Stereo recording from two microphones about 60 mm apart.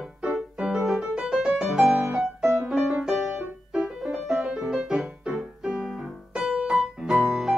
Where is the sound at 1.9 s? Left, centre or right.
Right.